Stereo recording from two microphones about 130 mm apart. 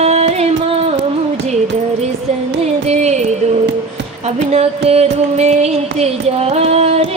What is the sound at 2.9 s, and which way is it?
Music, 60° right (ahead or behind).